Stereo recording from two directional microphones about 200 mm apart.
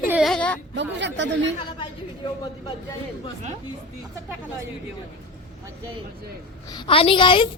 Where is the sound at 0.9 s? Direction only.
60° right (ahead or behind).